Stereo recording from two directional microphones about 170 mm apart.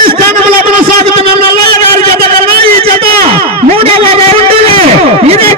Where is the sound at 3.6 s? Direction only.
35° right (ahead or behind).